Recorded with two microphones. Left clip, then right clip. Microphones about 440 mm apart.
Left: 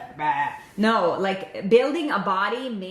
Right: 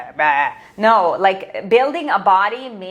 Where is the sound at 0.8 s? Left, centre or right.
Right.